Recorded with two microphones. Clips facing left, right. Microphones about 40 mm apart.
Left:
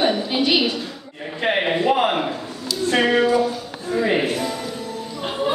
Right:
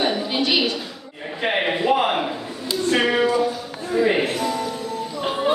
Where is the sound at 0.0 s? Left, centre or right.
Centre.